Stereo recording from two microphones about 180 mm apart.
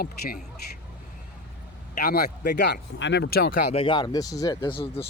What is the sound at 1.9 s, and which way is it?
Speech, 60° left (ahead or behind).